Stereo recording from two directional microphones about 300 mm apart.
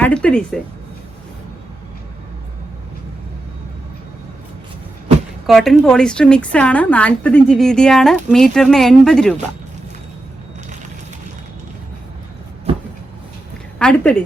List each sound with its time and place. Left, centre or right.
0.0 s a woman's voice: centre
5.5 s a woman's voice: centre
13.7 s speech: centre